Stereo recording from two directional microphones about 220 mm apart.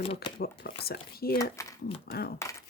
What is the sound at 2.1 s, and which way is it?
Speech, 45° left (ahead or behind).